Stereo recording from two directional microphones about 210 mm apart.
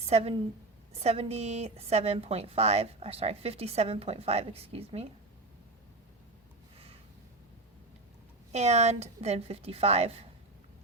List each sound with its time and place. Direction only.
0.1 s a woman's voice: 30° right (ahead or behind)
8.5 s a woman's voice: 30° right (ahead or behind)